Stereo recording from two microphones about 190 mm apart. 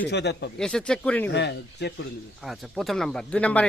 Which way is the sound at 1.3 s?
65° left (ahead or behind).